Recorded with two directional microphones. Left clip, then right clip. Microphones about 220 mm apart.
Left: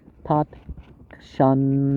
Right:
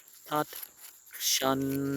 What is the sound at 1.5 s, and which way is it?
Speech, 55° right (ahead or behind).